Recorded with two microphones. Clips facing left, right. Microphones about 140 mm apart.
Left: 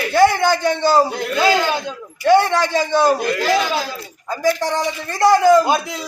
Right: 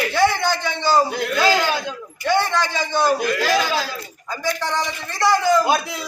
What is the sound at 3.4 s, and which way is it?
Speech, 20° left (ahead or behind).